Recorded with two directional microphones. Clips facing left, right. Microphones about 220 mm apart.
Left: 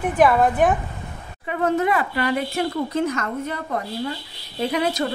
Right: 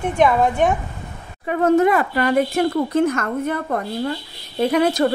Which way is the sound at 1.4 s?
45° right (ahead or behind).